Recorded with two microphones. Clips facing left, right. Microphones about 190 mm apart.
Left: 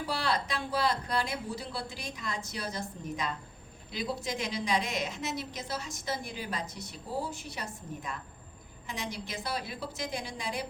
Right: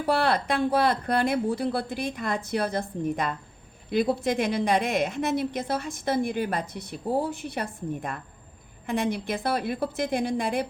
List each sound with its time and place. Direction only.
0.0 s a woman's voice: 55° right (ahead or behind)